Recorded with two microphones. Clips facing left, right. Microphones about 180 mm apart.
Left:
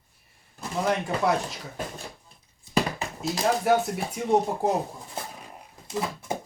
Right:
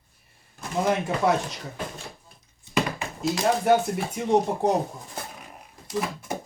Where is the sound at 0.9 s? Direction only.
Centre (ahead or behind).